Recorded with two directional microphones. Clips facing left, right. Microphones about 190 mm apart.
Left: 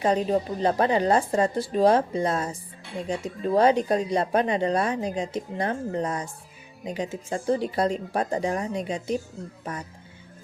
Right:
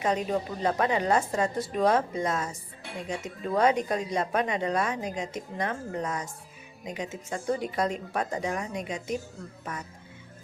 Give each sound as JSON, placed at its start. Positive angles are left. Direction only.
{"t": 0.0, "sound": "a woman's voice", "side_deg": 30}